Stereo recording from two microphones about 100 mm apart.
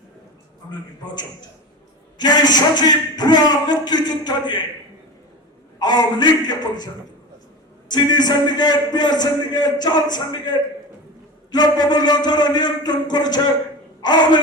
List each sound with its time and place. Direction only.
2.1 s a man's voice: 45° left (ahead or behind)
5.8 s a man's voice: 45° left (ahead or behind)
7.9 s a man's voice: 45° left (ahead or behind)
11.5 s a man's voice: 45° left (ahead or behind)